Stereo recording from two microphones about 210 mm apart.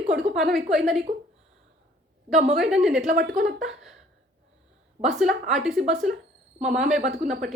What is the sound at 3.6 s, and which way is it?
Speech, centre (ahead or behind).